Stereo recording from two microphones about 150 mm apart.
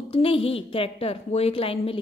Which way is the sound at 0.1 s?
40° left (ahead or behind).